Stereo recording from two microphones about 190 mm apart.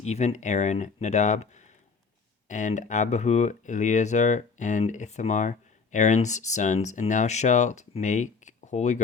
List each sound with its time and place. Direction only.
0.0 s speech: 35° left (ahead or behind)